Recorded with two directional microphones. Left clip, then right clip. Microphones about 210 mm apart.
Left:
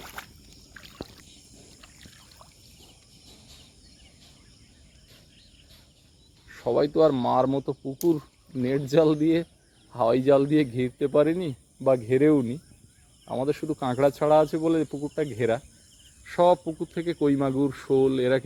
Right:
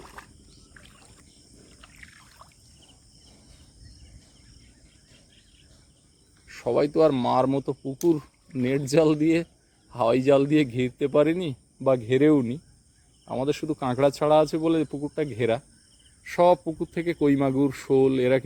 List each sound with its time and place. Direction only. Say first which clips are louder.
0.0 s rowboat: left 4 dB; 30° left (ahead or behind)
0.8 s rowboat: left 5 dB; 10° left (ahead or behind)
6.5 s speech: even; 15° right (ahead or behind)